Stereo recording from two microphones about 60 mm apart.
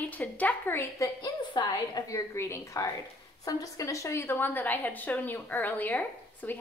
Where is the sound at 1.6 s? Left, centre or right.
Left.